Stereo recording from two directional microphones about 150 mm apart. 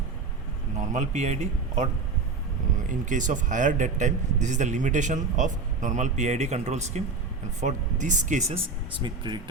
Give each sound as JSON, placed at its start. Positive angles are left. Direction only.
{"t": 0.8, "sound": "a man's voice", "side_deg": -50}